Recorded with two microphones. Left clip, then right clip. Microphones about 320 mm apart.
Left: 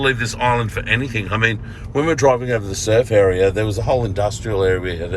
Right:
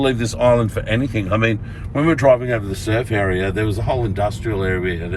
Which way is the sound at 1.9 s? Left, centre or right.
Centre.